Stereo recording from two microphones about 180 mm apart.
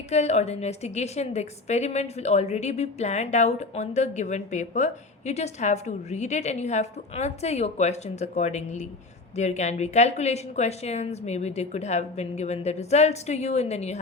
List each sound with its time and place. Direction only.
0.1 s a woman's voice: 35° left (ahead or behind)